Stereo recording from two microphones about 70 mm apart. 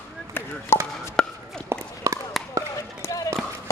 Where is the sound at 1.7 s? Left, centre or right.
Right.